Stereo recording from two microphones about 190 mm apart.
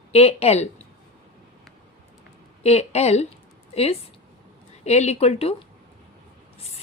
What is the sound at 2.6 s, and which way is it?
A woman's voice, 35° left (ahead or behind).